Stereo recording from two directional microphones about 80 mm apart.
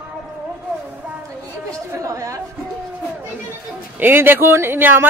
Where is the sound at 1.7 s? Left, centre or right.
Right.